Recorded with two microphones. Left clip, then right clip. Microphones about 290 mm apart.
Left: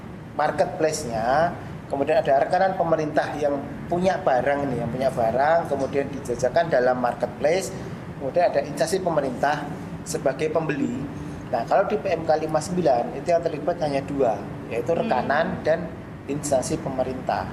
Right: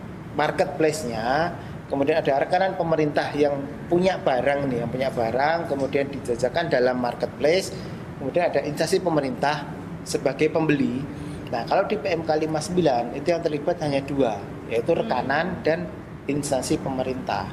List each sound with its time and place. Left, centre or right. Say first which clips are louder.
0.3 s a man's voice: even; right